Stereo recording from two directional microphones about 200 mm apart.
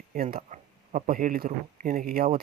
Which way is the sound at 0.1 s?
45° right (ahead or behind).